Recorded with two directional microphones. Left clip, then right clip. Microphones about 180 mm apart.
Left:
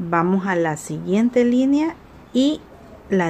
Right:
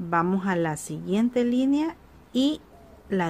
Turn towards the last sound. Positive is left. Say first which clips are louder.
# left 6 dB
turn(degrees=-15)  # may be behind; listen again after turning